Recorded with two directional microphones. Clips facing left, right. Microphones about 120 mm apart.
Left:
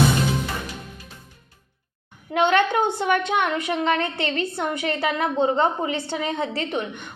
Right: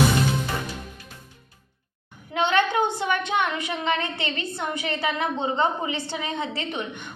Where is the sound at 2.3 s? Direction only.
50° left (ahead or behind).